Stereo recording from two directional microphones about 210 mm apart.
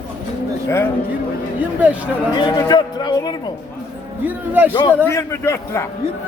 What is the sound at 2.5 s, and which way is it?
Speech, 20° left (ahead or behind).